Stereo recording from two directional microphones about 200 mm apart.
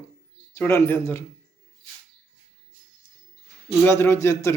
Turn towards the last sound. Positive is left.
turn(degrees=15)  # may be behind; listen again after turning